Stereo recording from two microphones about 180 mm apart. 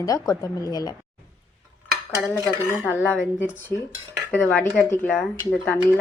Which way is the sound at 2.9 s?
10° left (ahead or behind).